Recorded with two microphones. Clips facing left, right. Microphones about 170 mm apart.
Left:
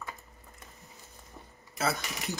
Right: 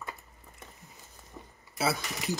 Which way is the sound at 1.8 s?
5° right (ahead or behind).